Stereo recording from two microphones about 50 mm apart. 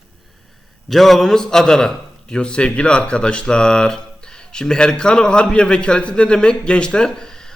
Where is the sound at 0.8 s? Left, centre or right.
Centre.